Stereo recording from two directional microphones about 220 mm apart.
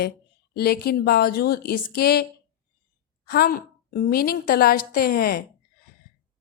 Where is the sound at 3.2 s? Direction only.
40° left (ahead or behind).